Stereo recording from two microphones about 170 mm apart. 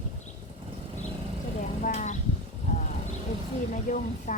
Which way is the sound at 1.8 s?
45° left (ahead or behind).